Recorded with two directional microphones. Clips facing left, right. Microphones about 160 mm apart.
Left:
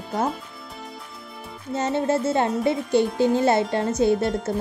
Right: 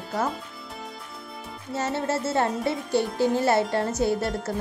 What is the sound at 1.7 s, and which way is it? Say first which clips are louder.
Speech: left 4 dB; 20° left (ahead or behind).